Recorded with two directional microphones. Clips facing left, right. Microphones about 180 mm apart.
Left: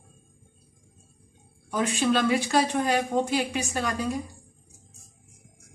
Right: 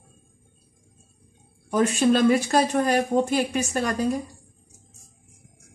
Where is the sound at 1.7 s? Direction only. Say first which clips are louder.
Right 5 dB; 45° right (ahead or behind).